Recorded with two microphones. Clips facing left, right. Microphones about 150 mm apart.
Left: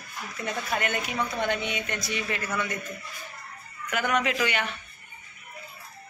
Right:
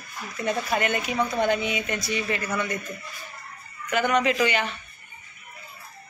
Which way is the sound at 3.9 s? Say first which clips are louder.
Right 4 dB; centre (ahead or behind).